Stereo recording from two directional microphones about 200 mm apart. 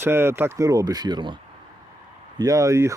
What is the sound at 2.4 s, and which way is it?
Speech, 15° right (ahead or behind).